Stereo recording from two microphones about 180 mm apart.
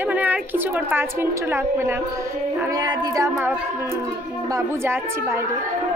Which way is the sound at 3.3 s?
10° right (ahead or behind).